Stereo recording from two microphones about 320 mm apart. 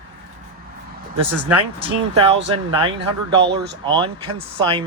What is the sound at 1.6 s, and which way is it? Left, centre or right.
Speech, centre.